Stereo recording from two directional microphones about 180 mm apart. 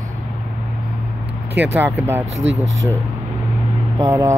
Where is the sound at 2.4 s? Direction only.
35° right (ahead or behind).